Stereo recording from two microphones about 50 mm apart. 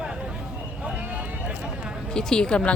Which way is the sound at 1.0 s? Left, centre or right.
Right.